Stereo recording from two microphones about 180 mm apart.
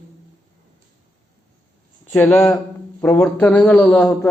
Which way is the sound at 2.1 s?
5° left (ahead or behind).